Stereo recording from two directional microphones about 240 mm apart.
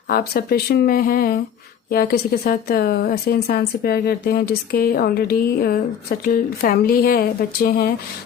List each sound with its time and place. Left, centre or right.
0.1 s a woman's voice: left